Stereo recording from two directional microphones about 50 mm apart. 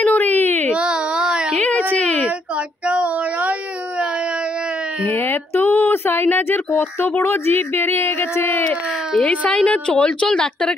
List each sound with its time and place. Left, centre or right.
0.0 s baby cry: left
0.7 s baby cry: centre
1.6 s a sound: left
2.5 s child singing: right
5.0 s a sound: left
6.2 s speech: left
7.1 s speech: left
9.2 s a woman's voice: left